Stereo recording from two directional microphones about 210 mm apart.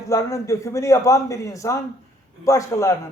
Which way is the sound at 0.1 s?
15° left (ahead or behind).